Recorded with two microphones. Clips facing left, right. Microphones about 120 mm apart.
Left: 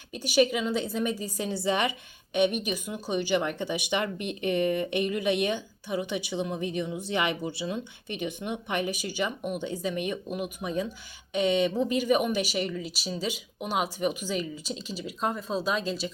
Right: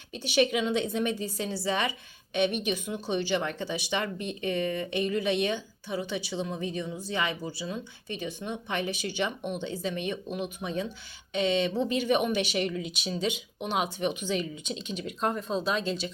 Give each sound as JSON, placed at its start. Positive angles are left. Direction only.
{"t": 0.3, "sound": "speech", "side_deg": 5}